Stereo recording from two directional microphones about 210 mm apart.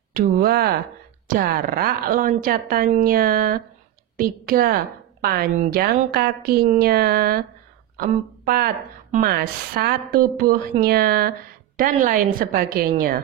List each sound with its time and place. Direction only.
0.1 s a woman's voice: 45° right (ahead or behind)